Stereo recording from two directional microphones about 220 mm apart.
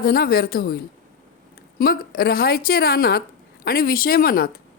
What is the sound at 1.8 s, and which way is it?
Speech, 45° left (ahead or behind).